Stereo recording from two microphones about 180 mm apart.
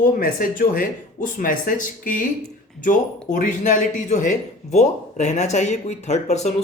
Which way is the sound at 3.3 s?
45° left (ahead or behind).